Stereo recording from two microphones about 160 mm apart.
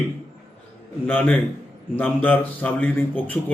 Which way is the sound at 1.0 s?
10° left (ahead or behind).